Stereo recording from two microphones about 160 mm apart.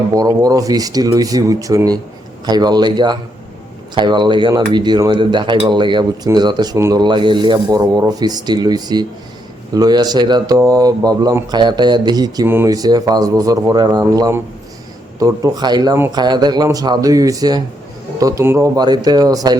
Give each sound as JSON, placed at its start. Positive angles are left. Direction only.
{"t": 0.2, "sound": "speech", "side_deg": -25}